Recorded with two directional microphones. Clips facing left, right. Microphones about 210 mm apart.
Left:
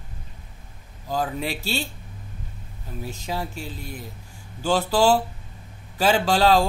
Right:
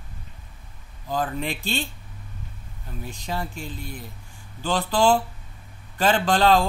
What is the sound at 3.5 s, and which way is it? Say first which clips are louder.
Speech: even; 40° left (ahead or behind).